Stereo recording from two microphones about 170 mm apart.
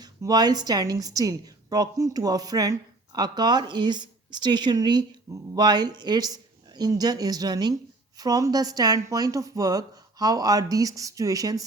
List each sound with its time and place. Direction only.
0.0 s a woman's voice: 25° right (ahead or behind)